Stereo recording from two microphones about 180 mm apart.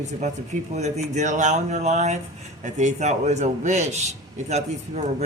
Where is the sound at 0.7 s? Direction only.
40° right (ahead or behind).